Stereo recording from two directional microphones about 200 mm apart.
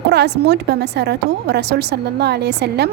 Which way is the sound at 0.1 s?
55° right (ahead or behind).